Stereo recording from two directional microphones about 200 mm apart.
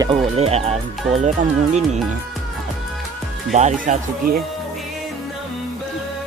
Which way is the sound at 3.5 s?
35° right (ahead or behind).